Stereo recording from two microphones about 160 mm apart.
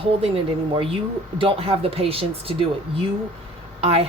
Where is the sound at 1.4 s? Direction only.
35° right (ahead or behind).